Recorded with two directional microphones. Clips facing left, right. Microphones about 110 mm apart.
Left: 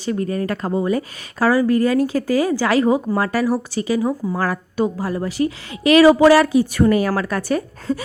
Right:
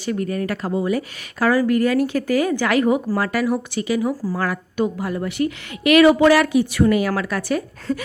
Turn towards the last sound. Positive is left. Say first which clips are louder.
# left 2 dB
turn(degrees=35)  # may be behind; listen again after turning